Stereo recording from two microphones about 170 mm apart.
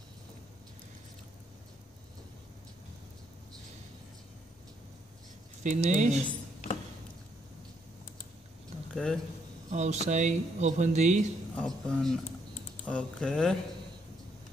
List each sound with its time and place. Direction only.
5.6 s speech: 45° right (ahead or behind)
8.9 s speech: centre (ahead or behind)
9.7 s speech: 45° right (ahead or behind)
11.5 s speech: 5° left (ahead or behind)